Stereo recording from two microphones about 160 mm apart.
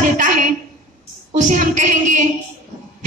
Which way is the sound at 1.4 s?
50° right (ahead or behind).